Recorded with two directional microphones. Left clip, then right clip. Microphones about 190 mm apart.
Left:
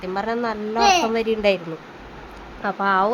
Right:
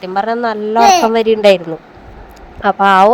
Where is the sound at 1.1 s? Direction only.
35° right (ahead or behind).